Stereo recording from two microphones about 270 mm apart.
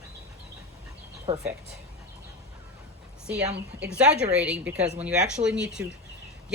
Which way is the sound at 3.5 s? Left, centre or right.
Right.